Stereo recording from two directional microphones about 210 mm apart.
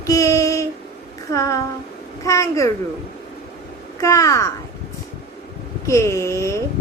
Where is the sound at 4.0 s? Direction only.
15° left (ahead or behind).